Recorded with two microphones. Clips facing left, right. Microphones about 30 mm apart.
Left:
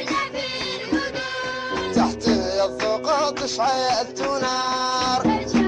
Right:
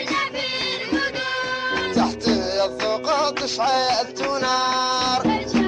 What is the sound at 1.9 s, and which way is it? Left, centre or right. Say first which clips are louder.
Music: left 2 dB; centre.